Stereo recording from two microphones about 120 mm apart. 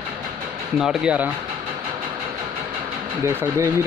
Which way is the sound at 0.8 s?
5° right (ahead or behind).